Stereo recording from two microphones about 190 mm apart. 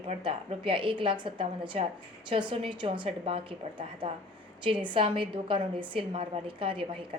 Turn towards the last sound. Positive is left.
turn(degrees=-25)  # may be behind; listen again after turning